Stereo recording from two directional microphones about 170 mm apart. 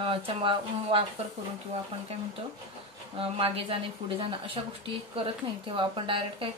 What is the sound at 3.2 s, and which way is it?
Speech, 35° right (ahead or behind).